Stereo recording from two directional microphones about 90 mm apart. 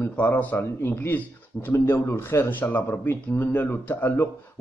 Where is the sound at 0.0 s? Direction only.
20° left (ahead or behind).